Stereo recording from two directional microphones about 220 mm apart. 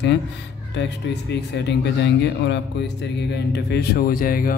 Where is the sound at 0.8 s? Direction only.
50° left (ahead or behind).